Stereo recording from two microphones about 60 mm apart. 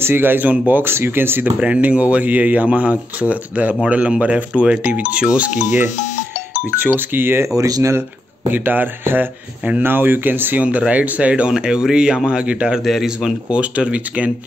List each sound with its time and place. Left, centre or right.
0.0 s speech: right
1.6 s speech: right
6.9 s speech: right
7.5 s speech: right
8.5 s speech: right
10.6 s speech: right
12.8 s a man's voice: centre
13.2 s speech: centre